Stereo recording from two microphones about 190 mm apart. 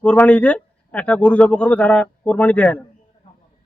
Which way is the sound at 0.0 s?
5° left (ahead or behind).